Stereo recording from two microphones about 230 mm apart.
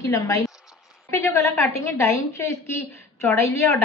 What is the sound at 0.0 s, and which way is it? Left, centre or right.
A woman's voice, centre.